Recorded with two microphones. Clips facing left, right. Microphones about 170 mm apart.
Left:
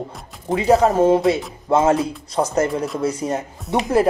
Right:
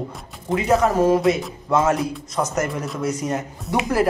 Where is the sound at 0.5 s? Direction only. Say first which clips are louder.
Left 3 dB; 30° left (ahead or behind).